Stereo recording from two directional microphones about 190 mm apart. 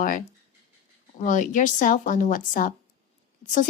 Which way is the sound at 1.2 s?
40° left (ahead or behind).